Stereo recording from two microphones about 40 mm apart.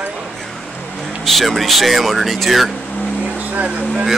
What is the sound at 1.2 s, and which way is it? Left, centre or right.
Speech, centre.